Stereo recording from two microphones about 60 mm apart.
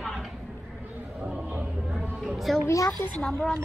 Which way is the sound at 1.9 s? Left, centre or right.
Centre.